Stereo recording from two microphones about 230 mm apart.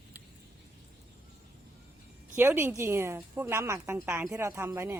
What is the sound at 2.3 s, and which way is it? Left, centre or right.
A woman's voice, centre.